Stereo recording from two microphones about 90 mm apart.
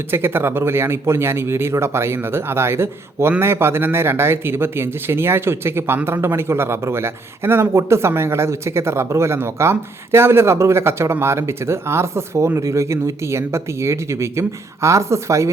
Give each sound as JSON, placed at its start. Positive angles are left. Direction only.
{"t": 0.1, "sound": "speech", "side_deg": -25}